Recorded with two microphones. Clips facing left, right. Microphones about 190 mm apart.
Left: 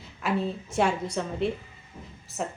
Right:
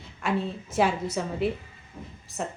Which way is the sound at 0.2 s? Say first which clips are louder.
Even; centre (ahead or behind).